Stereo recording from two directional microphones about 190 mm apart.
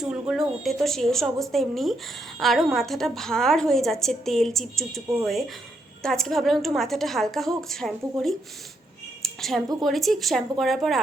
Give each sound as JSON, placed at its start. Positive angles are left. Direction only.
{"t": 0.0, "sound": "a woman's voice", "side_deg": -5}
{"t": 9.2, "sound": "a sound", "side_deg": 0}
{"t": 9.8, "sound": "a woman's voice", "side_deg": 0}